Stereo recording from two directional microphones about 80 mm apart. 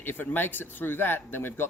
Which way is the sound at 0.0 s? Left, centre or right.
Left.